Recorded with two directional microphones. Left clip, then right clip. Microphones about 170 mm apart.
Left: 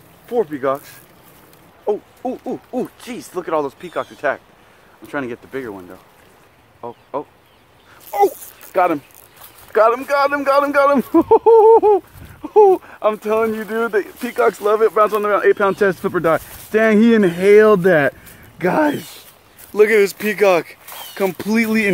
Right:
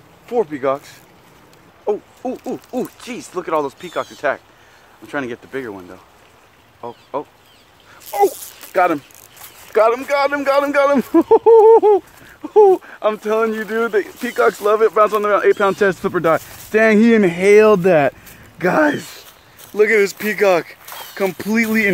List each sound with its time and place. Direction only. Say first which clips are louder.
0.3 s a man's voice: right 1 dB; 5° right (ahead or behind)
8.1 s a sound: even; centre (ahead or behind)
9.7 s a man's voice: even; centre (ahead or behind)
19.7 s speech: left 1 dB; 15° left (ahead or behind)